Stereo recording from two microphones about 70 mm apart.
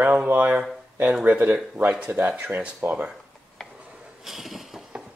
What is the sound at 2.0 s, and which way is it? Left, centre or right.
Speech, centre.